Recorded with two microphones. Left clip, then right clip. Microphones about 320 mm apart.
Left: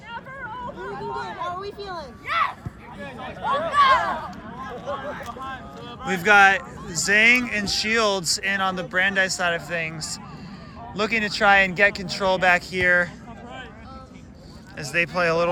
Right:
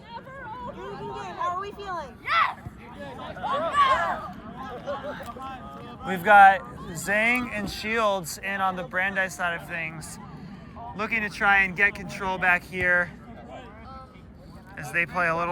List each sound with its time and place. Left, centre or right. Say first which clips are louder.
0.8 s a sound: left 5 dB; right
2.2 s speech: even; centre
3.7 s speech: left 4 dB; centre
4.9 s speech: left 3 dB; left
6.1 s speech: even; centre
14.8 s speech: left 3 dB; centre